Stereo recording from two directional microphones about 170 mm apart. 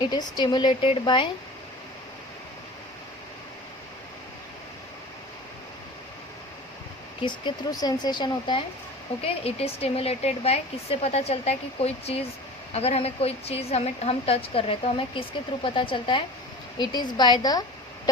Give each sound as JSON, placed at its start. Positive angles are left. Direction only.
{"t": 0.1, "sound": "speech", "side_deg": 25}
{"t": 7.2, "sound": "a woman's voice", "side_deg": 25}